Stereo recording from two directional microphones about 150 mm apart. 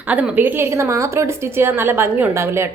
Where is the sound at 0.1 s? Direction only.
10° right (ahead or behind).